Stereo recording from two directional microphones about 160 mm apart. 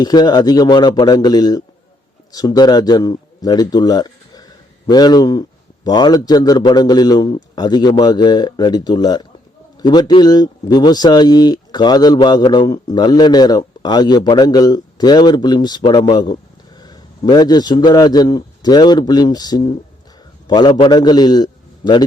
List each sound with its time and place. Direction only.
0.0 s a man's voice: 25° left (ahead or behind)